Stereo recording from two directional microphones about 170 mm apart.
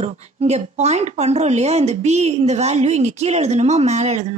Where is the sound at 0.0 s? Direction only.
40° right (ahead or behind).